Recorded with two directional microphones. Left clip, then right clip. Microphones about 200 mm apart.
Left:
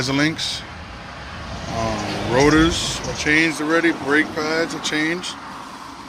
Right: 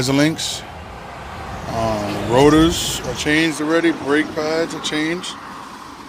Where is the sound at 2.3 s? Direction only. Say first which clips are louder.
Right 3 dB; 20° right (ahead or behind).